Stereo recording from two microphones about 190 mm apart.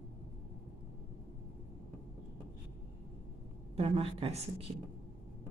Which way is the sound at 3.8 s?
30° right (ahead or behind).